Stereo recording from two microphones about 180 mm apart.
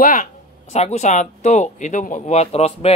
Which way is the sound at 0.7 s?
40° left (ahead or behind).